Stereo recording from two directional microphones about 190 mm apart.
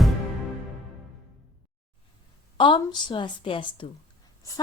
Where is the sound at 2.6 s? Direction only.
25° left (ahead or behind).